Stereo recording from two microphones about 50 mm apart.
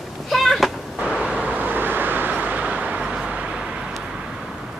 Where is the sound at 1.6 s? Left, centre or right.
Right.